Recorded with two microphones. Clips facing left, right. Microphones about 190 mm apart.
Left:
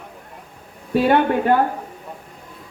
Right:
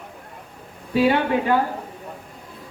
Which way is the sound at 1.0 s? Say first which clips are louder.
Left 2 dB; 55° left (ahead or behind).